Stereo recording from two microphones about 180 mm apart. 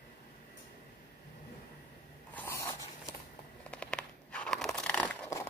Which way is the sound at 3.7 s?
5° left (ahead or behind).